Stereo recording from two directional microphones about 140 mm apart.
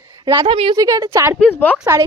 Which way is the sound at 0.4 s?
40° right (ahead or behind).